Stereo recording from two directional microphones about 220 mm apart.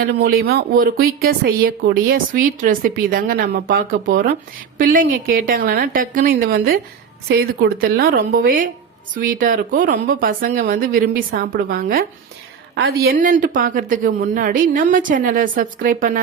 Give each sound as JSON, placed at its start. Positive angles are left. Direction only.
{"t": 0.0, "sound": "speech", "side_deg": -45}